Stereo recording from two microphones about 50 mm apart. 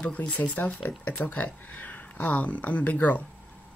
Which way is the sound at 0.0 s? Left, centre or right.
Left.